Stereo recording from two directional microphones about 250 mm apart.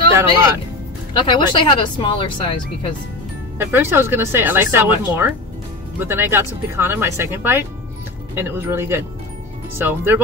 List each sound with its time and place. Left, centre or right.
1.1 s speech: centre
3.5 s speech: centre